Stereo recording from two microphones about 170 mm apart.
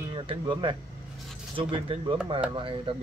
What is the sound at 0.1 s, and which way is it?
Speech, 30° right (ahead or behind).